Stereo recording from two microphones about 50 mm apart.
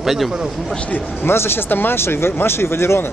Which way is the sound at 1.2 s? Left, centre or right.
Left.